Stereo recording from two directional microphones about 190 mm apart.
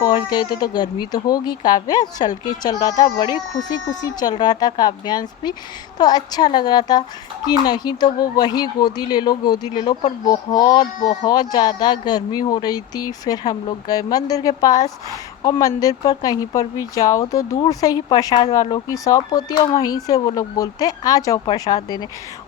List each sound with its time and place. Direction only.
0.0 s speech: 20° left (ahead or behind)